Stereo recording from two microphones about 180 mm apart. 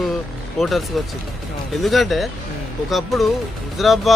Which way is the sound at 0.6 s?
Centre (ahead or behind).